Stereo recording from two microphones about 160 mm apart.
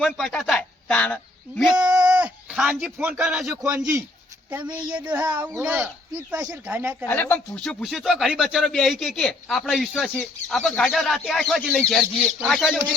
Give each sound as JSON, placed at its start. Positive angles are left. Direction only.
{"t": 0.0, "sound": "speech", "side_deg": 0}
{"t": 3.8, "sound": "speech", "side_deg": -15}
{"t": 7.1, "sound": "speech", "side_deg": 10}